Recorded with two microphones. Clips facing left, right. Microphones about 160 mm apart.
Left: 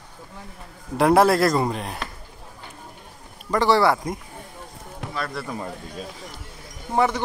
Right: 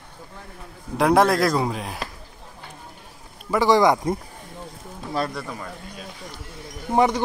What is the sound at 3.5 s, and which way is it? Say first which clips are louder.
Speech: right 1 dB; 10° right (ahead or behind).